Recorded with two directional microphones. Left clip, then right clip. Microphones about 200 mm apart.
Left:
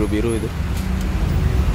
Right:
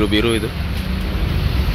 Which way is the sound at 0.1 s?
Centre (ahead or behind).